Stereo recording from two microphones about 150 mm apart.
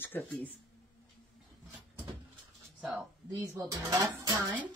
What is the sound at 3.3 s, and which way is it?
Speech, 20° right (ahead or behind).